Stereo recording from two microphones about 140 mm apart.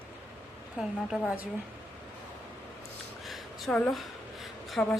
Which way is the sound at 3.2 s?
Centre (ahead or behind).